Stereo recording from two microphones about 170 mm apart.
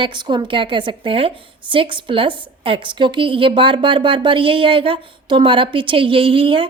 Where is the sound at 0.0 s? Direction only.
25° right (ahead or behind).